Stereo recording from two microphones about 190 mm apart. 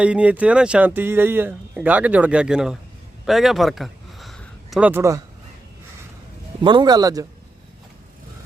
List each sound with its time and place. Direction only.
0.0 s speech: 5° right (ahead or behind)
3.2 s a sound: centre (ahead or behind)
6.6 s speech: 25° right (ahead or behind)